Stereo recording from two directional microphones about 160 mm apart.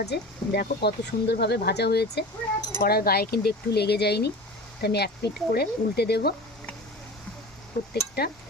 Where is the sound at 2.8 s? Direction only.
75° left (ahead or behind); by 6.4 s 90° left.